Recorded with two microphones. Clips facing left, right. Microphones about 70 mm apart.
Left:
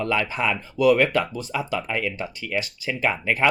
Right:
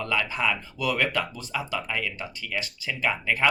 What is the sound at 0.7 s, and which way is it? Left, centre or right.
Speech, left.